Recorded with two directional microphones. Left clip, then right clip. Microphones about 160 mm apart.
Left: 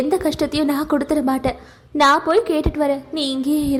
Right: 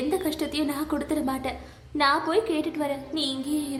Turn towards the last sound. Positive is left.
turn(degrees=45)  # may be behind; listen again after turning